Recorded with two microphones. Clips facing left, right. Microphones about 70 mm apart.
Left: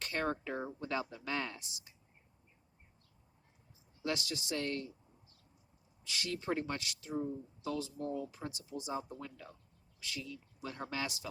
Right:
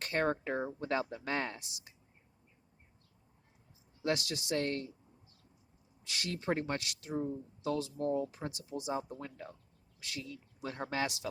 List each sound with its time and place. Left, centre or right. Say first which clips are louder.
0.0 s speech: right 4 dB; right
4.0 s speech: right 4 dB; right
6.1 s speech: right 2 dB; right
8.9 s speech: right 3 dB; right
10.0 s speech: even; right
11.0 s speech: right 5 dB; right